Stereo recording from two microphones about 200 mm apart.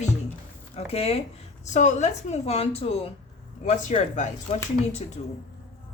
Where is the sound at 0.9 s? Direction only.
30° left (ahead or behind).